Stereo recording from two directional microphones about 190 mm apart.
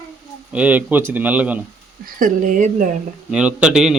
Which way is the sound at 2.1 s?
45° right (ahead or behind).